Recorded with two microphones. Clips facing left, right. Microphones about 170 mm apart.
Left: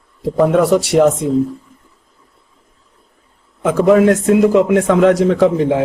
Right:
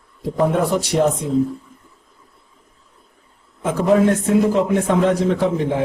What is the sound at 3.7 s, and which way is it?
A man's voice, 85° left.